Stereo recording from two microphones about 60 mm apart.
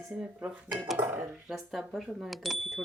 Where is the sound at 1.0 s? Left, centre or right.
Right.